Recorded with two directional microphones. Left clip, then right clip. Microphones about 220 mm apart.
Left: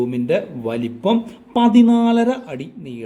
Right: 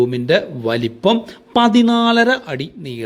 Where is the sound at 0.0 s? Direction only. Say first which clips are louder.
Right 4 dB; 15° right (ahead or behind).